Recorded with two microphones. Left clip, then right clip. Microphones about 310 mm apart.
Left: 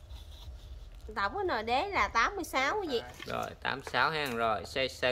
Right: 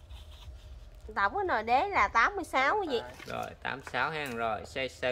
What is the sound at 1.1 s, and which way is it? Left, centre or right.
Speech, centre.